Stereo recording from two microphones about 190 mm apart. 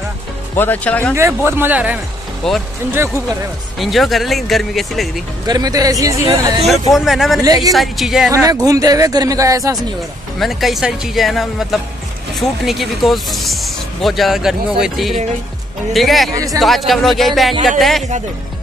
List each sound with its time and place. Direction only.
0.6 s speech: 10° left (ahead or behind)
1.1 s speech: 15° right (ahead or behind)
2.4 s speech: centre (ahead or behind)
3.7 s speech: centre (ahead or behind)
5.5 s speech: 20° right (ahead or behind)
6.6 s speech: centre (ahead or behind)
7.4 s speech: 20° right (ahead or behind)
7.7 s speech: centre (ahead or behind)
8.3 s speech: 20° right (ahead or behind)
10.4 s speech: centre (ahead or behind)